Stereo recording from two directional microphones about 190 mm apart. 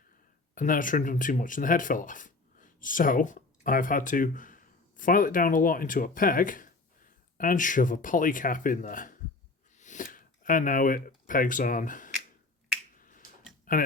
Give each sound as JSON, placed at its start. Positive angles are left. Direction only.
{"t": 0.5, "sound": "speech", "side_deg": 45}
{"t": 13.0, "sound": "finger snapping", "side_deg": 45}
{"t": 13.7, "sound": "speech", "side_deg": 45}